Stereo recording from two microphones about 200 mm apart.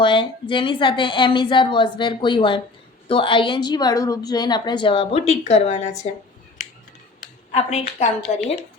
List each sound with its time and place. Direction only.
0.0 s a woman's voice: 25° left (ahead or behind)
7.5 s a woman's voice: 30° left (ahead or behind)